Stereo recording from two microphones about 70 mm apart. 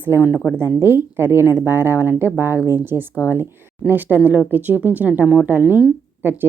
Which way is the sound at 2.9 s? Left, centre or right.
Left.